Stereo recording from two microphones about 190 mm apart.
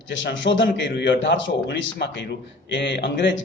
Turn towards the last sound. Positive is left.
turn(degrees=70)  # may be behind; listen again after turning